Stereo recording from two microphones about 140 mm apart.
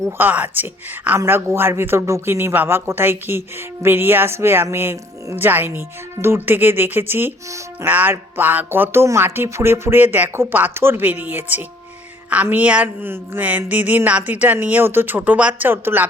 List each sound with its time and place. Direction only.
0.0 s a woman's voice: 15° right (ahead or behind)